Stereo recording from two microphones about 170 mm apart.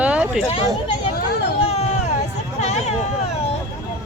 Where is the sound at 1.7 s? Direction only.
40° left (ahead or behind).